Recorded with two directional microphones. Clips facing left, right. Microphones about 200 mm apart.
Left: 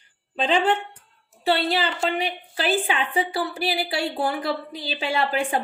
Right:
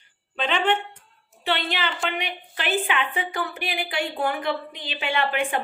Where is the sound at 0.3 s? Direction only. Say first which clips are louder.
Left 2 dB; 35° left (ahead or behind).